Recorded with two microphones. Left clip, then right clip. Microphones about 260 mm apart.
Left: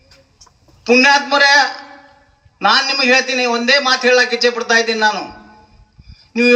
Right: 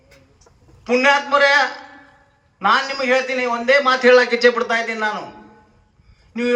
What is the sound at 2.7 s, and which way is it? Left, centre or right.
A man's voice, left.